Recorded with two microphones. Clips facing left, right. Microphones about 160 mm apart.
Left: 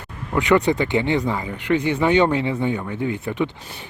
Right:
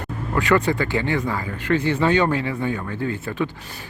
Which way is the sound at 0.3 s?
20° left (ahead or behind).